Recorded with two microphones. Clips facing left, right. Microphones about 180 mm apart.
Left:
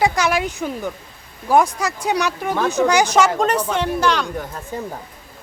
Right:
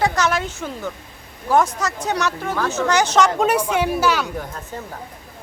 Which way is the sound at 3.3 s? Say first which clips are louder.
Right 1 dB; 10° right (ahead or behind).